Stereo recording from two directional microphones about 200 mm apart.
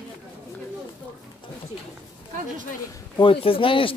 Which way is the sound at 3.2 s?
25° left (ahead or behind).